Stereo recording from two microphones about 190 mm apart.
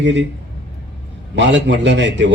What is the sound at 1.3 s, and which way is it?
A man's voice, 70° right (ahead or behind).